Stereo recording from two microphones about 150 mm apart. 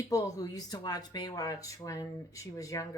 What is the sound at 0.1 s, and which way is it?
Speech, 25° left (ahead or behind).